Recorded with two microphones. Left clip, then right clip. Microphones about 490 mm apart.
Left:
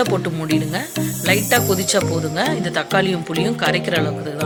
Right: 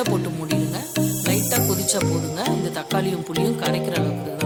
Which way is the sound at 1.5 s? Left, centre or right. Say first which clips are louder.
Left 6 dB; right.